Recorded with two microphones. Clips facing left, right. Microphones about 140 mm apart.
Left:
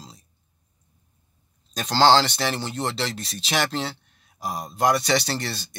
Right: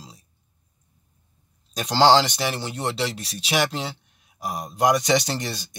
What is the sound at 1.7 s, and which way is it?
Speech, 15° right (ahead or behind).